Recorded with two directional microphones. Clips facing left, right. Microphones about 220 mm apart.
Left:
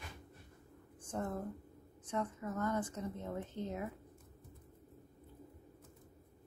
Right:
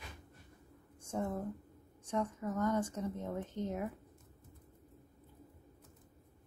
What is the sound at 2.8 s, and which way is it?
Speech, 30° right (ahead or behind).